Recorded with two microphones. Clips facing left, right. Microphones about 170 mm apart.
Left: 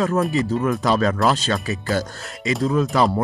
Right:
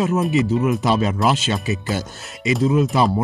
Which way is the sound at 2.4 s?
5° right (ahead or behind).